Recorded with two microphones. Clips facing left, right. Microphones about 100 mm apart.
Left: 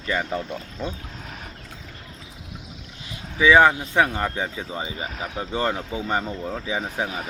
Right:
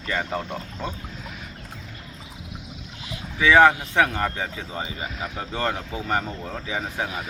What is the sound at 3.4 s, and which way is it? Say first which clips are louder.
Speech: even; 25° left (ahead or behind).